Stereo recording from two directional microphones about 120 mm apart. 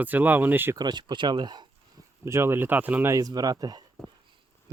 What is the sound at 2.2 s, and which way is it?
Speech, 20° right (ahead or behind).